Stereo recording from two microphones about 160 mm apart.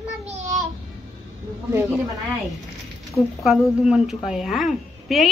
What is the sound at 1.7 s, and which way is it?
Speech, 15° right (ahead or behind).